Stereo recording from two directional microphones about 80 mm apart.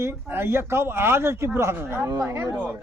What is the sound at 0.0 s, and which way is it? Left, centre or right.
A man's voice, right.